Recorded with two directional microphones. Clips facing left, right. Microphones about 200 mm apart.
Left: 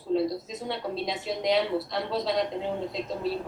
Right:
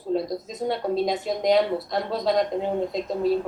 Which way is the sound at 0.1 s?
45° right (ahead or behind).